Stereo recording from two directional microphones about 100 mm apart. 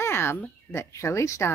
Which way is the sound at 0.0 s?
25° left (ahead or behind).